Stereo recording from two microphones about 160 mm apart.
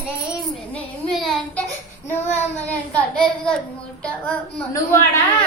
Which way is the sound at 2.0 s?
10° left (ahead or behind).